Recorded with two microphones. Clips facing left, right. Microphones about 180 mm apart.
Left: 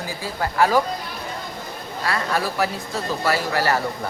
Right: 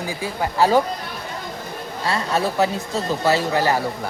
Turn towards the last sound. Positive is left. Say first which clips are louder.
# right 3 dB
turn(degrees=-20)  # may be behind; listen again after turning